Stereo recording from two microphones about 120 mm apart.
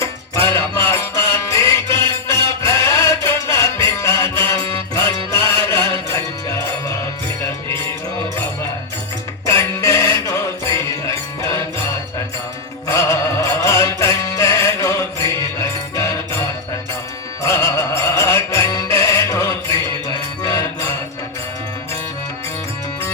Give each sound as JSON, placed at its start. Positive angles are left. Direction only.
{"t": 0.0, "sound": "music", "side_deg": 20}
{"t": 9.5, "sound": "music", "side_deg": 25}
{"t": 12.9, "sound": "music", "side_deg": 25}
{"t": 17.4, "sound": "music", "side_deg": 25}